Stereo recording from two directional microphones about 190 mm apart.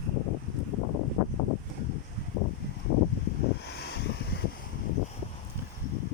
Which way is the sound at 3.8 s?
60° left (ahead or behind).